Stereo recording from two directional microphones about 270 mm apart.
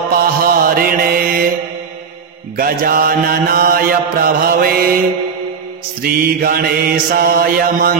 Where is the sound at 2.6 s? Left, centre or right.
Right.